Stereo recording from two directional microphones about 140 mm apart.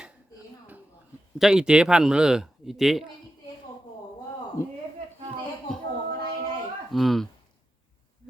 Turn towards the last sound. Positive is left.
turn(degrees=0)  # may be behind; listen again after turning